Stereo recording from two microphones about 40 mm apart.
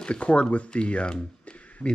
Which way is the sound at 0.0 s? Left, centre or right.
Left.